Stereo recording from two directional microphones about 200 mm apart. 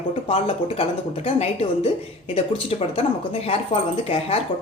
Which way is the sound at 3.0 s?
30° left (ahead or behind).